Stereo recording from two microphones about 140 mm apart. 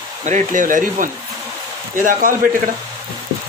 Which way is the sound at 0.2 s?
60° right (ahead or behind).